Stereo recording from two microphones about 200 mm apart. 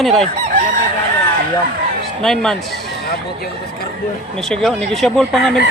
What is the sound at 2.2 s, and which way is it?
Speech, centre (ahead or behind).